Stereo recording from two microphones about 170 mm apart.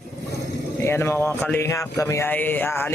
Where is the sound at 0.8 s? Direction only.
15° left (ahead or behind).